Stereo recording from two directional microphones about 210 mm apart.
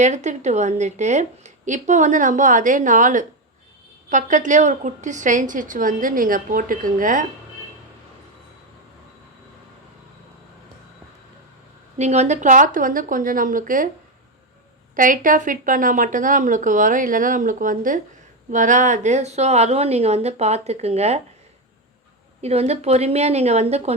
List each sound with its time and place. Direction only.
0.0 s a woman's voice: 35° right (ahead or behind)
11.9 s a woman's voice: 30° right (ahead or behind)
14.9 s a woman's voice: 40° right (ahead or behind)
22.4 s a woman's voice: 30° right (ahead or behind)